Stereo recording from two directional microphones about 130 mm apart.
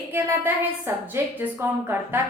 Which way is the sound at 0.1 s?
15° right (ahead or behind).